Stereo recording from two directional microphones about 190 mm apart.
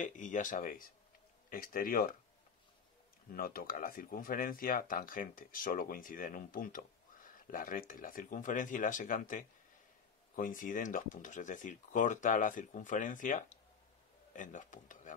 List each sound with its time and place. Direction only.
0.0 s speech: 40° left (ahead or behind)
3.3 s speech: 50° left (ahead or behind)